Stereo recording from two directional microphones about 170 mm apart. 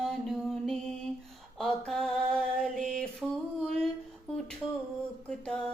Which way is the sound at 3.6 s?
Centre (ahead or behind).